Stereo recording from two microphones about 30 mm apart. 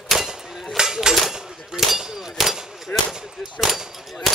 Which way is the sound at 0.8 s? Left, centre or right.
Right.